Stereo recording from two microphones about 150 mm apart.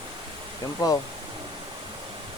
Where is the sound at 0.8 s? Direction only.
20° left (ahead or behind).